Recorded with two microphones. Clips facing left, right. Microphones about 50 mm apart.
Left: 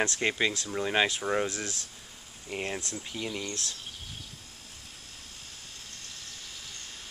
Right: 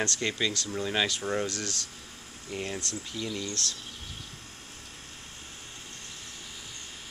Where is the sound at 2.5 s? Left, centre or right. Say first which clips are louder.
Even; left.